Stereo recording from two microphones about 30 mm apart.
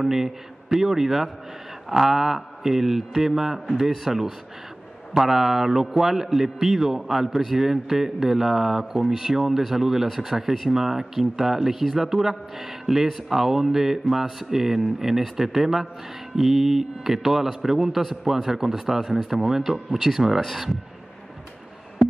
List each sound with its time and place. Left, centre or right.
0.7 s a man's voice: centre
20.3 s speech: centre